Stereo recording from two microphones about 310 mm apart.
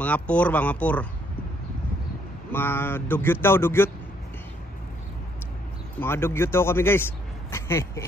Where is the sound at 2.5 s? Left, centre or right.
Centre.